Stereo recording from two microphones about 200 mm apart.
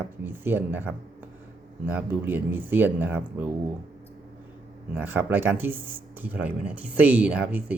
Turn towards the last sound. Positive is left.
turn(degrees=-5)  # may be behind; listen again after turning